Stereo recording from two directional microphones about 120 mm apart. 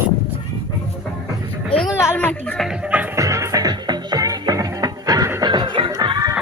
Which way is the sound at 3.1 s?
25° right (ahead or behind).